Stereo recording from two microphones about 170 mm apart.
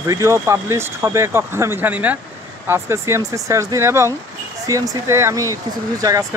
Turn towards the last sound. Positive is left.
turn(degrees=-20)  # may be behind; listen again after turning